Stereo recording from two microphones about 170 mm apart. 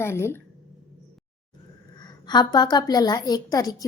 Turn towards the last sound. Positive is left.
turn(degrees=20)  # may be behind; listen again after turning